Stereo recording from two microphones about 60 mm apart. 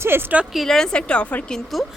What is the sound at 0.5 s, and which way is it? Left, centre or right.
A woman's voice, centre.